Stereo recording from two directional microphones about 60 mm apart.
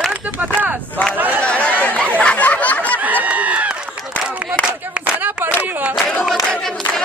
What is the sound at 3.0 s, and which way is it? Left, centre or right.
Chicken, right.